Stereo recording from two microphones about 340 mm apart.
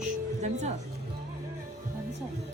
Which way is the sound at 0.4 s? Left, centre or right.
Centre.